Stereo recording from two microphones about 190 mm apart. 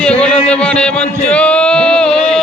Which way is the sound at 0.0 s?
5° left (ahead or behind).